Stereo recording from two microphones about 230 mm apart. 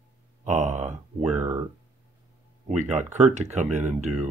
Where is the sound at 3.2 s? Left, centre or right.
Right.